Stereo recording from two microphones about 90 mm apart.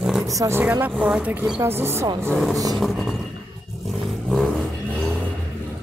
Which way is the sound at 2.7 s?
Centre (ahead or behind).